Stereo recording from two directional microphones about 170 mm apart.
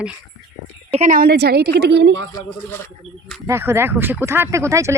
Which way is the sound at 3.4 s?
15° right (ahead or behind).